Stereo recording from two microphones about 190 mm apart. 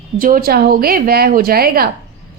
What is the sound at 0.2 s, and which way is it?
A woman's voice, 50° right (ahead or behind).